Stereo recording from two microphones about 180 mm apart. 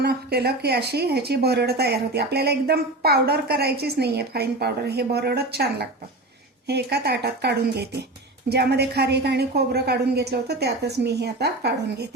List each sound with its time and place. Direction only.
0.0 s speech: 60° right (ahead or behind)